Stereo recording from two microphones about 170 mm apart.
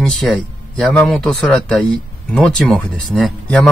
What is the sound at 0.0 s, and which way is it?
A man's voice, centre (ahead or behind).